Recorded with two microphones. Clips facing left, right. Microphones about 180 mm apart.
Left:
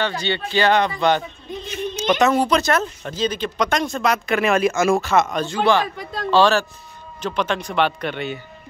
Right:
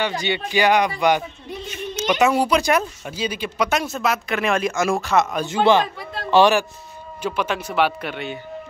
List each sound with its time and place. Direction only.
0.0 s speech: 15° right (ahead or behind)
5.4 s speech: 20° right (ahead or behind); by 8.3 s 5° right (ahead or behind)